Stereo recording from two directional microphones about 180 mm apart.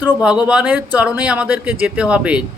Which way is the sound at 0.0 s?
5° right (ahead or behind).